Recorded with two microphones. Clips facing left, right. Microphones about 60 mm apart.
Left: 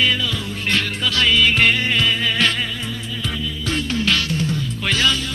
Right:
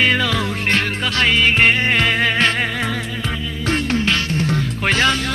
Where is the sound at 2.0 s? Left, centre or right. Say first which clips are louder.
Right 3 dB; right.